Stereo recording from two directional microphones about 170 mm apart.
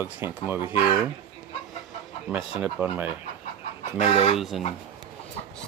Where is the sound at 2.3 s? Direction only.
5° right (ahead or behind).